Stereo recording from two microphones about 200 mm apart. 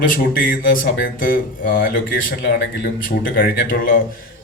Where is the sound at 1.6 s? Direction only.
50° left (ahead or behind).